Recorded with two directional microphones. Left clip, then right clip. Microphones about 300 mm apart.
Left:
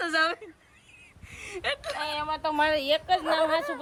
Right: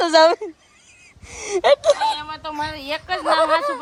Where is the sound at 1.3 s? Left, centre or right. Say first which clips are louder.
Right 16 dB; centre.